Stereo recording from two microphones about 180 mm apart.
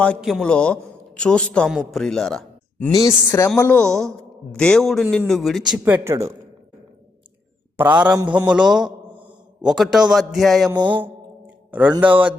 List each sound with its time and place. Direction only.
0.2 s a man's voice: centre (ahead or behind)
2.9 s a woman's voice: 15° left (ahead or behind); by 6.3 s 15° right (ahead or behind)
7.8 s a man's voice: 10° right (ahead or behind)
10.7 s a sound: 25° right (ahead or behind)
11.7 s speech: 10° right (ahead or behind)